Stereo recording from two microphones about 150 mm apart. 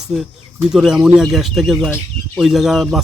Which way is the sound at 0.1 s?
5° right (ahead or behind).